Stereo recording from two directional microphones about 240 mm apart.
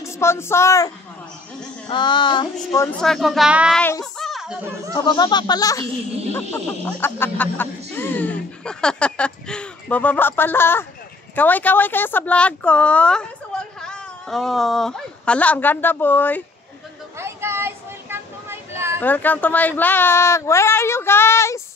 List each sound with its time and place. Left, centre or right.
0.0 s speech: centre
4.9 s a woman's voice: centre
17.2 s a sound: centre
18.9 s speech: centre